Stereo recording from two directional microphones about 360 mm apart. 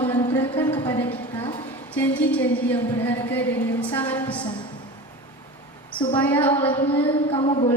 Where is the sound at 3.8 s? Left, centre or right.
Centre.